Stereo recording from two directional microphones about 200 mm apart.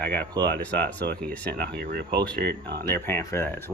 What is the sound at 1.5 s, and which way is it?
Speech, 55° right (ahead or behind).